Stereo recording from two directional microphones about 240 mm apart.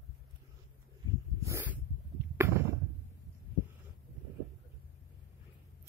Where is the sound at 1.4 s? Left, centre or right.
Centre.